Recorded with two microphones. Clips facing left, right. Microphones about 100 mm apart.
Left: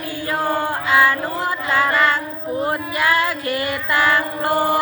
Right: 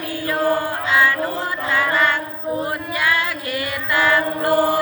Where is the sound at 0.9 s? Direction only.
30° left (ahead or behind).